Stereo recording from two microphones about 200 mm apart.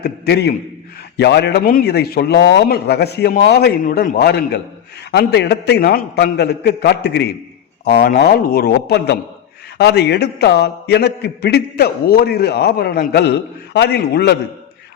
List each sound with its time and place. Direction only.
0.0 s a man's voice: 55° left (ahead or behind)